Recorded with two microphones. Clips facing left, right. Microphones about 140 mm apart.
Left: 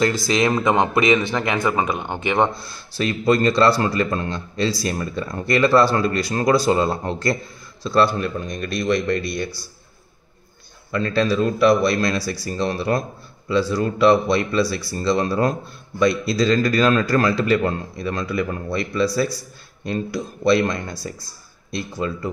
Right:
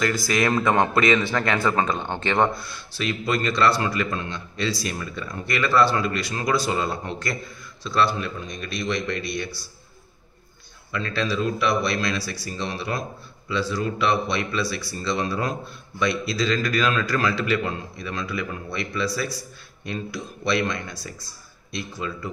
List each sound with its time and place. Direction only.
0.0 s a man's voice: 25° left (ahead or behind)
2.5 s a man's voice: 35° left (ahead or behind)
10.9 s a man's voice: 40° left (ahead or behind)